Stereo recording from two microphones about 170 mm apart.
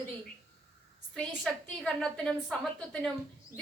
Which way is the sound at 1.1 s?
5° left (ahead or behind).